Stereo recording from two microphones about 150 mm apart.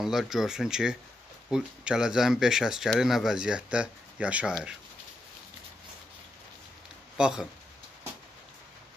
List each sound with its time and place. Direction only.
0.0 s speech: centre (ahead or behind)
7.2 s speech: 5° right (ahead or behind)